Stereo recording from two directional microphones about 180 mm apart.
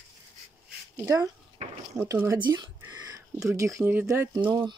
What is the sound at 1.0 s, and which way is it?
Speech, 15° right (ahead or behind).